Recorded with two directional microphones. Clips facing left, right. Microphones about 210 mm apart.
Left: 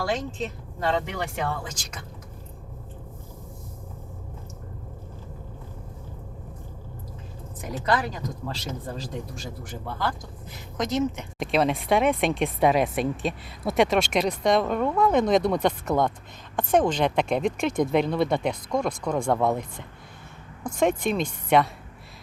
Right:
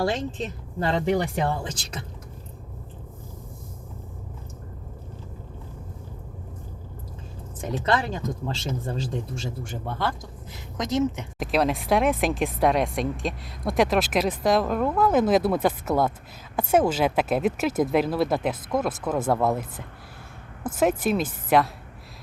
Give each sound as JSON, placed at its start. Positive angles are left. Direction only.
{"t": 0.8, "sound": "speech", "side_deg": -35}
{"t": 7.6, "sound": "speech", "side_deg": -25}
{"t": 11.3, "sound": "speech", "side_deg": 0}